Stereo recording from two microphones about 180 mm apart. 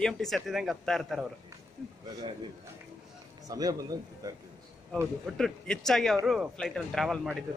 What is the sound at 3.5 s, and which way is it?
Speech, 20° right (ahead or behind).